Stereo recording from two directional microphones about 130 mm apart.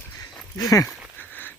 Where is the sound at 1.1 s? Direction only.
15° left (ahead or behind).